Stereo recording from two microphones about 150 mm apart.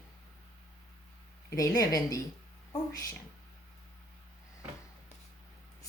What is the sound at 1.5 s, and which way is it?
Speech, 20° left (ahead or behind).